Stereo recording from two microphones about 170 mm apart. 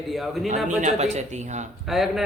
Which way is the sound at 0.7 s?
45° right (ahead or behind).